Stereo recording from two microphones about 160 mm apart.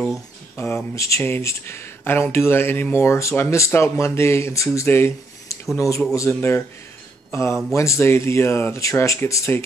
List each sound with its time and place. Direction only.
0.6 s speech: 15° left (ahead or behind)